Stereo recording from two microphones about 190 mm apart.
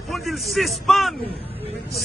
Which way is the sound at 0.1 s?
Centre (ahead or behind).